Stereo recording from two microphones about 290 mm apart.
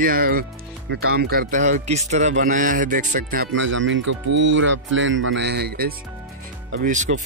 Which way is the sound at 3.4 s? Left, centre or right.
Right.